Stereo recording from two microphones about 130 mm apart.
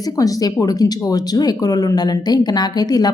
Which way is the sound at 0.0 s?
25° left (ahead or behind).